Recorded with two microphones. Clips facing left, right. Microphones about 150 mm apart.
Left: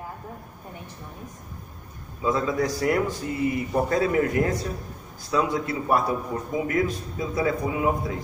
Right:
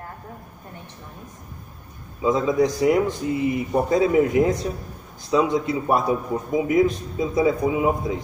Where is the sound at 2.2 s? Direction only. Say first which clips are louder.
Right 5 dB; 15° right (ahead or behind).